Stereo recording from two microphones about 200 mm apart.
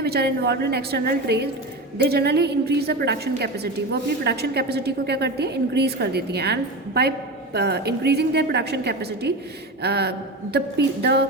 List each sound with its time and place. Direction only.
0.0 s a woman's voice: 55° right (ahead or behind)